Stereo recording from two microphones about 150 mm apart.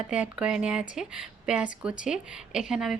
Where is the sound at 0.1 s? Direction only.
5° right (ahead or behind).